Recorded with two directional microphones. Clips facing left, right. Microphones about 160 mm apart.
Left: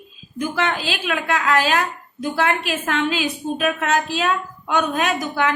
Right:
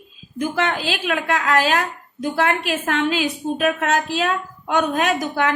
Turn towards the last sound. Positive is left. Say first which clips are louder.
# right 1 dB
turn(degrees=-45)  # may be behind; listen again after turning